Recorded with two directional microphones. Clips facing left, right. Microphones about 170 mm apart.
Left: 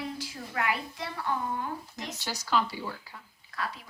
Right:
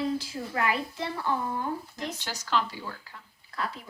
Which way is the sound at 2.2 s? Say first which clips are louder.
Left 2 dB; 10° left (ahead or behind).